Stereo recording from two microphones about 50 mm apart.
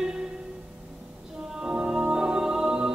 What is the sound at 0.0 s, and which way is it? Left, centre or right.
Music, centre.